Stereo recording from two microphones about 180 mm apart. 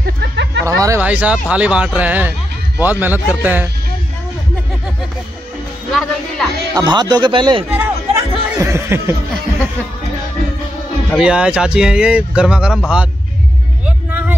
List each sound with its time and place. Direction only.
0.0 s a sound: 75° right (ahead or behind)
0.7 s speech: 15° right (ahead or behind)
5.9 s speech: centre (ahead or behind)
6.7 s speech: 20° right (ahead or behind)
7.7 s chatter: 15° right (ahead or behind)
11.1 s speech: 5° right (ahead or behind)
13.8 s vehicle: 10° right (ahead or behind)